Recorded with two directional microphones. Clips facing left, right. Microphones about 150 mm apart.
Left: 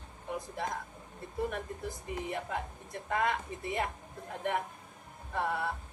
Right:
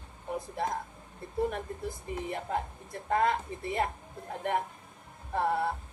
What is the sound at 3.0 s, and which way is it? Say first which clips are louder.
A woman's voice: right 4 dB; 35° right (ahead or behind).